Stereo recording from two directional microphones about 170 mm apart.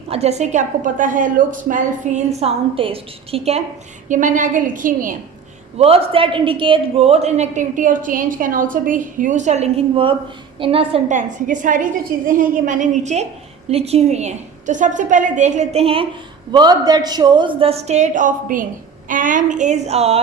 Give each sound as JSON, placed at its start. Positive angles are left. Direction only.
{"t": 0.1, "sound": "a man's voice", "side_deg": -40}
{"t": 4.1, "sound": "a woman's voice", "side_deg": -50}
{"t": 5.7, "sound": "a man's voice", "side_deg": -35}
{"t": 16.5, "sound": "a woman's voice", "side_deg": -25}